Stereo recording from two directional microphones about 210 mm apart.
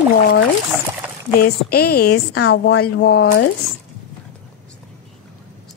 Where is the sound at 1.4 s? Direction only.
50° left (ahead or behind).